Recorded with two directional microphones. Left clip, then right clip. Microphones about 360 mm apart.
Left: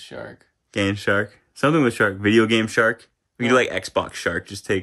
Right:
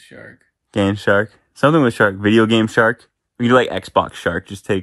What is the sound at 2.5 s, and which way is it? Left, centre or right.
Speech, centre.